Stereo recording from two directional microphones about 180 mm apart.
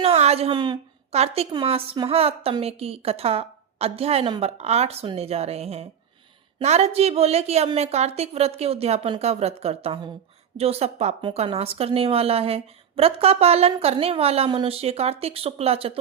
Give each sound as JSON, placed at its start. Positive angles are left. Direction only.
{"t": 0.0, "sound": "a woman's voice", "side_deg": -35}
{"t": 1.1, "sound": "a woman's voice", "side_deg": -35}